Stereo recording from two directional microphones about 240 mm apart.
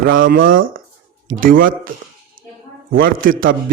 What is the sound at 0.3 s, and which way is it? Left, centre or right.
A man's voice, right.